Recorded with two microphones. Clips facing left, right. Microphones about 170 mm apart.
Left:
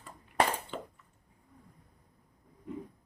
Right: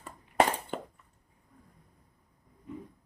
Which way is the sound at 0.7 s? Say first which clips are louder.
Right 3 dB; 50° right (ahead or behind).